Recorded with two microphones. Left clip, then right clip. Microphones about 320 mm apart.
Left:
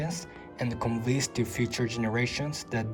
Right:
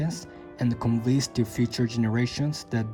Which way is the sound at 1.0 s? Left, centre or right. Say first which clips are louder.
Right 3 dB; centre.